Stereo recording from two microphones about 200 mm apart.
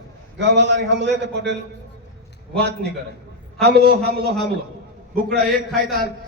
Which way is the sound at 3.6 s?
55° right (ahead or behind).